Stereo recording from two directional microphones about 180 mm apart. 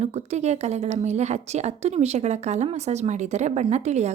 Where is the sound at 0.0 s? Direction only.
35° right (ahead or behind).